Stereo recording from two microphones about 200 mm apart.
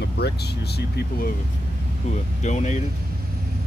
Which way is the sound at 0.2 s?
55° left (ahead or behind).